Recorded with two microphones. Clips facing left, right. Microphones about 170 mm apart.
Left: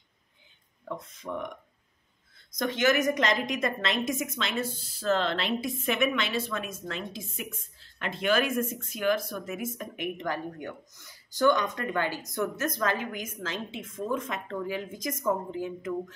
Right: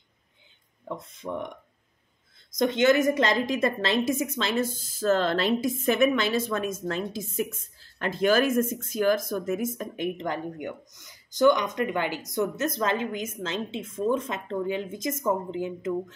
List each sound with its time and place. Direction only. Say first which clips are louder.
0.9 s speech: right 1 dB; 20° right (ahead or behind)
2.6 s a woman's voice: right 4 dB; 25° right (ahead or behind)